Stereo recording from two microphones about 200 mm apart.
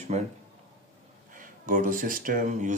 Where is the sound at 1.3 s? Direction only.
40° right (ahead or behind).